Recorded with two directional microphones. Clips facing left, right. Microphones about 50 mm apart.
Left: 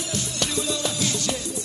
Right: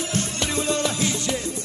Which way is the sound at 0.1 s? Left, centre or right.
Right.